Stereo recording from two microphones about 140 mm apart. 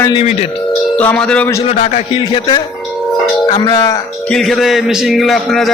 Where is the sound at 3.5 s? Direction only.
30° left (ahead or behind).